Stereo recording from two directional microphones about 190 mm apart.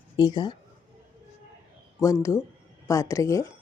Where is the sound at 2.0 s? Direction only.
15° left (ahead or behind).